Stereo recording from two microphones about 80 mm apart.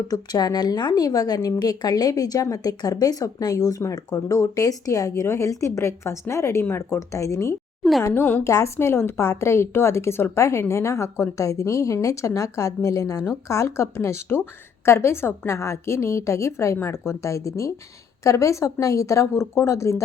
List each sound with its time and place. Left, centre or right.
0.1 s a woman's voice: left
8.0 s a woman's voice: left